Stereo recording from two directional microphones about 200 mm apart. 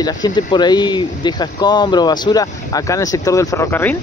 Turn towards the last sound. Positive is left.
turn(degrees=10)  # may be behind; listen again after turning